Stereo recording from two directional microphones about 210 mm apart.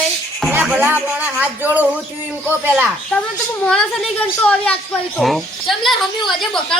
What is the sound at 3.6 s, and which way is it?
A child's voice, 5° left (ahead or behind).